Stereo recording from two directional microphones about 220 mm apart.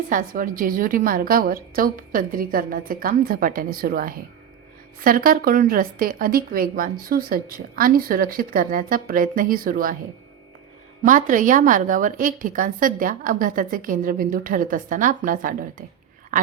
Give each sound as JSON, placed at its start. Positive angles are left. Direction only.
{"t": 0.1, "sound": "speech", "side_deg": -40}
{"t": 11.0, "sound": "speech", "side_deg": -35}